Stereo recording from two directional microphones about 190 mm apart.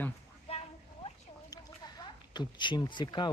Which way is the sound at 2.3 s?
25° left (ahead or behind).